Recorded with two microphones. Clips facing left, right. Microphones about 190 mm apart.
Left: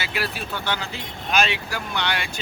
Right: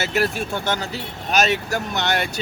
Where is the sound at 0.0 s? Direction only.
45° right (ahead or behind).